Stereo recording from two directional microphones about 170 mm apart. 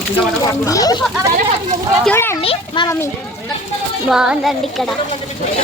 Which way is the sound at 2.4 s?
35° left (ahead or behind).